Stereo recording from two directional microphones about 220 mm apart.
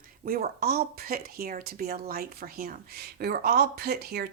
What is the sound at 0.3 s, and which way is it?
Speech, 45° right (ahead or behind).